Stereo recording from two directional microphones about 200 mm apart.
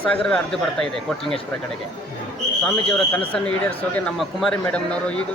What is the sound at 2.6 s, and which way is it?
Speech, 5° left (ahead or behind).